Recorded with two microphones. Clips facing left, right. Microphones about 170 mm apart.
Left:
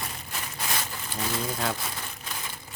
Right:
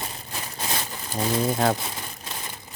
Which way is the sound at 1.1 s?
50° right (ahead or behind).